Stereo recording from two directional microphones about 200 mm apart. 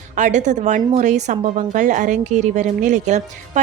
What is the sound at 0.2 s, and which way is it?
A woman's voice, 35° right (ahead or behind).